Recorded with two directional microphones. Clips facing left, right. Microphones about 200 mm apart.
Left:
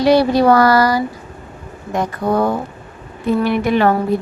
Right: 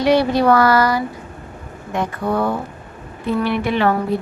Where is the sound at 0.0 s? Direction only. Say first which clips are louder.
Left 3 dB; 35° left (ahead or behind).